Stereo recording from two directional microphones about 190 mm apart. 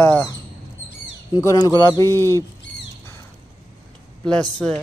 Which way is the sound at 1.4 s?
20° left (ahead or behind).